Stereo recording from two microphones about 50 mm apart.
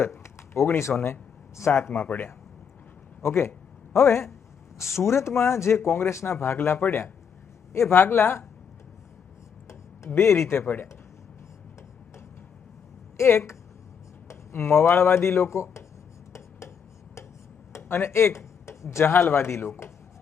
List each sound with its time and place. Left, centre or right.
0.0 s a sound: left
0.9 s speech: left
1.9 s speech: left
3.2 s speech: left
4.8 s speech: left
5.7 s speech: left
7.7 s speech: left
7.9 s speech: left
10.1 s speech: left
13.1 s speech: left
16.3 s a sound: left
19.1 s speech: left